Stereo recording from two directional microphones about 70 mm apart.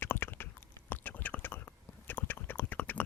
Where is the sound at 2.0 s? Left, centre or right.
Left.